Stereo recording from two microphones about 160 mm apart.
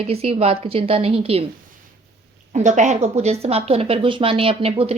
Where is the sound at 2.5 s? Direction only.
50° right (ahead or behind).